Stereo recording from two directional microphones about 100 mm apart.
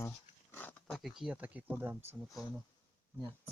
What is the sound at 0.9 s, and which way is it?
Speech, centre (ahead or behind).